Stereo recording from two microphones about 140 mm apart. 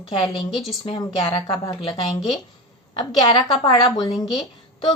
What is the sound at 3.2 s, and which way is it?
Speech, 30° left (ahead or behind).